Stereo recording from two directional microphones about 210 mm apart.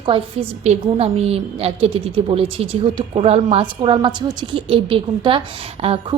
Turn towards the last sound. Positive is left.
turn(degrees=-25)  # may be behind; listen again after turning